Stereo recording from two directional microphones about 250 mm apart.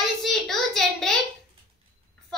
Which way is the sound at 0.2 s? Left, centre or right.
Centre.